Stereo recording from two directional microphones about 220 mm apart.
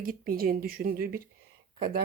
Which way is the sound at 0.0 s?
40° right (ahead or behind).